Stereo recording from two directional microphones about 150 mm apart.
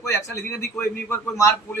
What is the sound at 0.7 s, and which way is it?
Speech, 20° left (ahead or behind).